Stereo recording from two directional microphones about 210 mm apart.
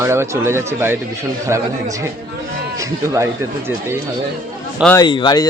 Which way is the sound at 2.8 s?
15° right (ahead or behind).